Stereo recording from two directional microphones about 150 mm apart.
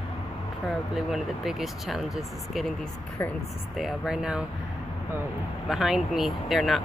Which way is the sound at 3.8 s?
Centre (ahead or behind).